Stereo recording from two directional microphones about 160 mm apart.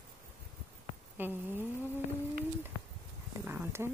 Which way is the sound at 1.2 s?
10° right (ahead or behind).